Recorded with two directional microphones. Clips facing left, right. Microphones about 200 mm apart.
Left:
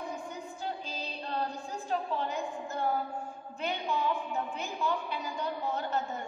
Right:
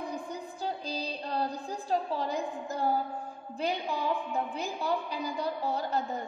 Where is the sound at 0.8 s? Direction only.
35° right (ahead or behind).